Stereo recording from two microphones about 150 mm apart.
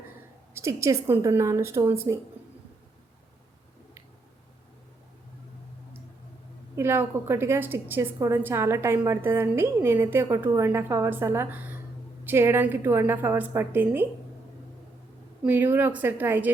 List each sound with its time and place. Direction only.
0.5 s a woman's voice: 20° right (ahead or behind)
6.7 s a woman's voice: 15° right (ahead or behind)
15.4 s a woman's voice: 15° right (ahead or behind)